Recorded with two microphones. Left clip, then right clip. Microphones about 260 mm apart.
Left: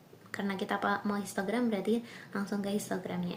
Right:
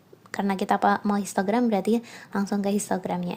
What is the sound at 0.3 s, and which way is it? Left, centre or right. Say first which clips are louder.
Speech: right 10 dB; right.